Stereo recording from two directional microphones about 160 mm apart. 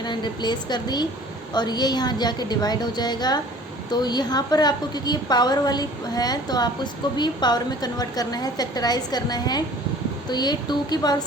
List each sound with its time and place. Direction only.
0.0 s a woman's voice: 30° left (ahead or behind)